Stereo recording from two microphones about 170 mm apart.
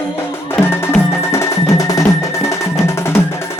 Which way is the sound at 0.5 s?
15° left (ahead or behind).